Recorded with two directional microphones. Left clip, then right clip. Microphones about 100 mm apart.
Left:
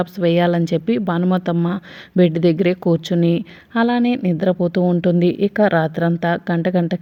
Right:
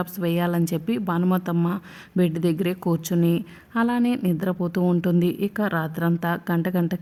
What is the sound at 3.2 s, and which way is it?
A woman's voice, 25° left (ahead or behind).